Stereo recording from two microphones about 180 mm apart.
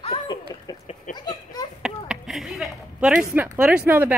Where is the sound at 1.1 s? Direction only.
25° left (ahead or behind).